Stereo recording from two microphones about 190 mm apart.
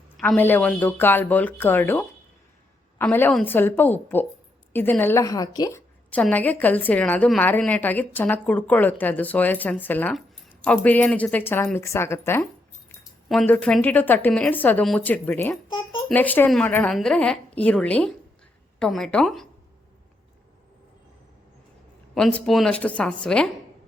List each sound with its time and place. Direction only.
0.2 s a woman's voice: 10° left (ahead or behind)
13.2 s a woman's voice: centre (ahead or behind)
22.1 s a woman's voice: 5° left (ahead or behind)